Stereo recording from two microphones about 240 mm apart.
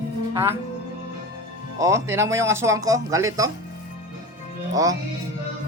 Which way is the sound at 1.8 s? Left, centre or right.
Centre.